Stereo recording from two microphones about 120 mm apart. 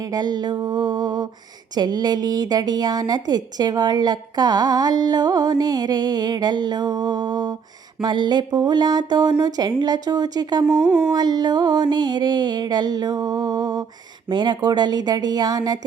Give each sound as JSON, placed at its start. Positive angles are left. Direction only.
{"t": 0.1, "sound": "a woman's voice", "side_deg": -35}
{"t": 10.8, "sound": "a sound", "side_deg": -10}
{"t": 11.1, "sound": "a woman's voice", "side_deg": -35}